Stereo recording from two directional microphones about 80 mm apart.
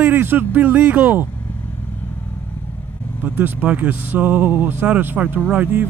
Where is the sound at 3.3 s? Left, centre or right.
Right.